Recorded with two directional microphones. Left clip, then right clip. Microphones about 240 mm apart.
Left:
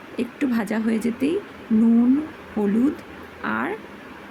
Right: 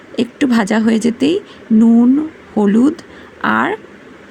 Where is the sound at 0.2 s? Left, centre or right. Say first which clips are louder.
Right 10 dB; right.